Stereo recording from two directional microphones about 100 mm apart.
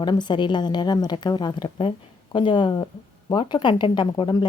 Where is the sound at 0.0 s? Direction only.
45° left (ahead or behind).